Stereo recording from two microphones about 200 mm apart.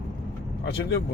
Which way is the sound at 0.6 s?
55° left (ahead or behind).